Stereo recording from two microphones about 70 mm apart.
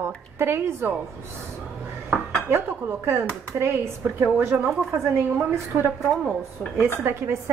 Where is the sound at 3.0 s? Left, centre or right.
Right.